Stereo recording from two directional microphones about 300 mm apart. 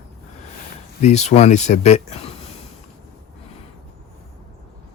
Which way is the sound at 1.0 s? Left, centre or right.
Left.